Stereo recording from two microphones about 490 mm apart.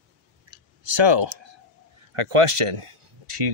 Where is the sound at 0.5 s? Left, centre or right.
Right.